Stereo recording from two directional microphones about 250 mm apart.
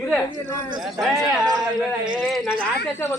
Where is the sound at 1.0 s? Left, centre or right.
Centre.